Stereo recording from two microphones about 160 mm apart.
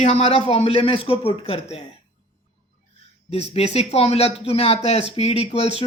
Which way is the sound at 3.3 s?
40° left (ahead or behind).